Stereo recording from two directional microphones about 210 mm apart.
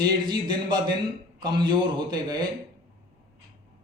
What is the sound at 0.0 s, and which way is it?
A man's voice, 20° right (ahead or behind).